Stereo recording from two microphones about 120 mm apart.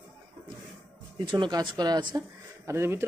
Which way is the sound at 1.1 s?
40° right (ahead or behind).